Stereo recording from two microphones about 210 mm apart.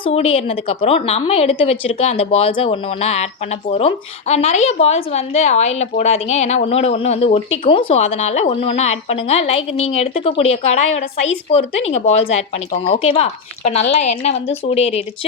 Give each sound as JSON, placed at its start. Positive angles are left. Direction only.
{"t": 0.0, "sound": "a woman's voice", "side_deg": 30}